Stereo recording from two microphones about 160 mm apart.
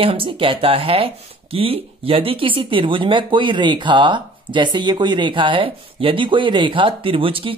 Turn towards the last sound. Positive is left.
turn(degrees=-35)  # may be behind; listen again after turning